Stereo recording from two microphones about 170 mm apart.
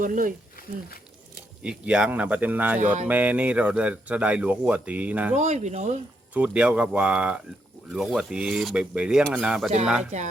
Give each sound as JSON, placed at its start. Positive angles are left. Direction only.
{"t": 0.0, "sound": "speech", "side_deg": -50}
{"t": 1.6, "sound": "speech", "side_deg": -5}
{"t": 5.4, "sound": "speech", "side_deg": -40}
{"t": 6.3, "sound": "speech", "side_deg": -10}